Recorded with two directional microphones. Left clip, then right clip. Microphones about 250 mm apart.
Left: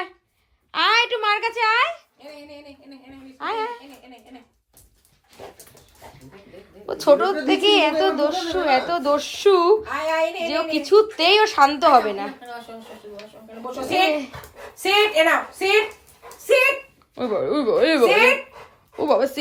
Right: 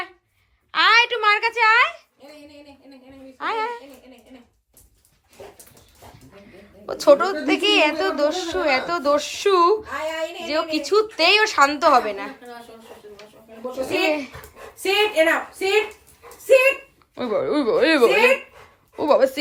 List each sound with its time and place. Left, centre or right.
0.7 s a sound: centre
3.3 s a sound: centre
5.4 s dog: centre
6.8 s a woman's voice: centre
13.7 s a woman's voice: centre
17.2 s speech: centre